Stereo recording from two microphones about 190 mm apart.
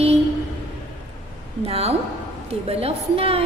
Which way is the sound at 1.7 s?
30° right (ahead or behind).